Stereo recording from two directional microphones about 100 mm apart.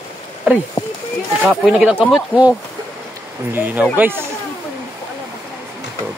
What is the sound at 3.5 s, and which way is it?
Speech, 20° right (ahead or behind).